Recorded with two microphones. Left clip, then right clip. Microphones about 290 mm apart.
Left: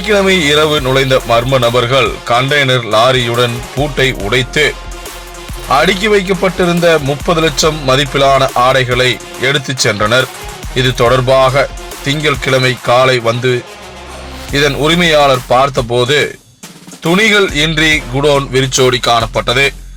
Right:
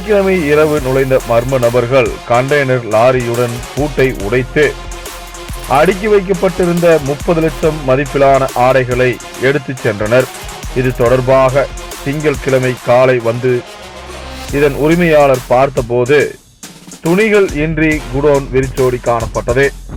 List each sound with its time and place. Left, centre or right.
0.1 s speech: centre
3.8 s speech: centre
4.3 s speech: centre
14.5 s speech: centre